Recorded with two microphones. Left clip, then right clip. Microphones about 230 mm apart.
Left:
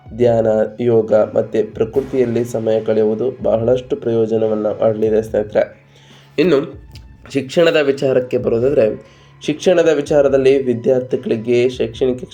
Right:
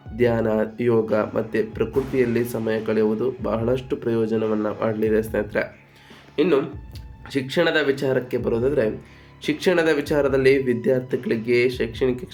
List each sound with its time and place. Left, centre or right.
0.2 s speech: centre
6.3 s speech: left
7.3 s speech: centre